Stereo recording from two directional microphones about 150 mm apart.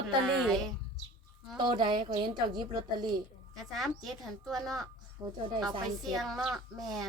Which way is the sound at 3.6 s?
Centre (ahead or behind).